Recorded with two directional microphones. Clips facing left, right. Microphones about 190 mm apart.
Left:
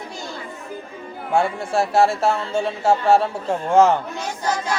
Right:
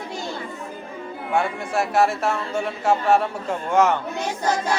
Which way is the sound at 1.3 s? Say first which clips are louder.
Left 3 dB; 30° left (ahead or behind).